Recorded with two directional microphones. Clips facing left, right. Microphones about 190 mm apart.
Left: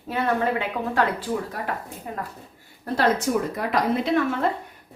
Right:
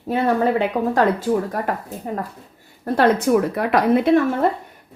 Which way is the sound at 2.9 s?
60° right (ahead or behind).